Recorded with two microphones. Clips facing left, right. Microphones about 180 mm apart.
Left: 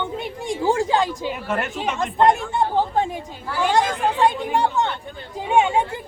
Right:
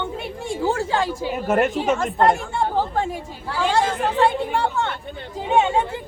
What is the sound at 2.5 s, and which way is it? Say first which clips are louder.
Chatter: left 1 dB; 20° left (ahead or behind).